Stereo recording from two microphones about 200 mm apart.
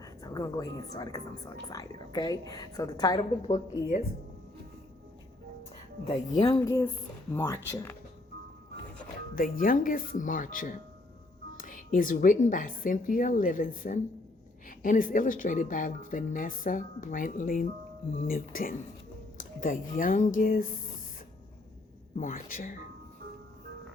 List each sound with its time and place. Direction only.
0.0 s a woman's voice: 20° left (ahead or behind)
3.4 s speech: 35° left (ahead or behind)
6.1 s a woman's voice: 30° left (ahead or behind)
6.7 s speech: 15° left (ahead or behind)
9.3 s speech: 45° left (ahead or behind)
22.2 s speech: 45° left (ahead or behind)